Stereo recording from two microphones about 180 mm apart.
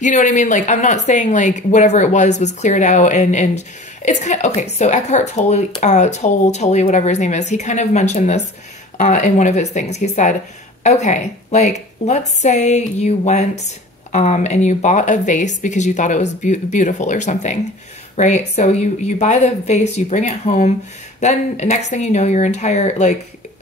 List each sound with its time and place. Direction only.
0.0 s speech: 45° left (ahead or behind)